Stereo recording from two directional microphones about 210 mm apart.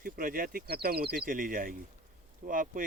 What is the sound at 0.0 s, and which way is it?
Speech, 45° right (ahead or behind).